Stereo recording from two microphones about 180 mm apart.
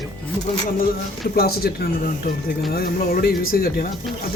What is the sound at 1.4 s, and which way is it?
Speech, 60° left (ahead or behind).